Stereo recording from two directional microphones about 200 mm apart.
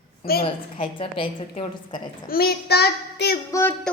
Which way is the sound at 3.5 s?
10° left (ahead or behind).